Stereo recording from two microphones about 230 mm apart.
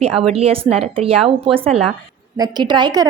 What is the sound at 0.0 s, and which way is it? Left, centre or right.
A woman's voice, right.